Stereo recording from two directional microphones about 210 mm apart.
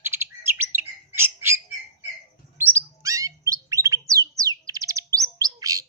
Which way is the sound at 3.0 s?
15° right (ahead or behind).